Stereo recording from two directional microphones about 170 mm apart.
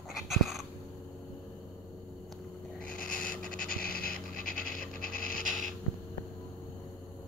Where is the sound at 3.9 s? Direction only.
55° left (ahead or behind).